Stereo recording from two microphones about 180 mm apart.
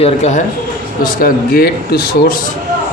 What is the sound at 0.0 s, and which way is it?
Speech, 40° left (ahead or behind).